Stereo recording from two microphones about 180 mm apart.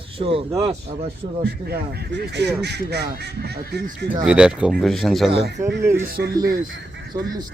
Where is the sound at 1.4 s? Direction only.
60° right (ahead or behind).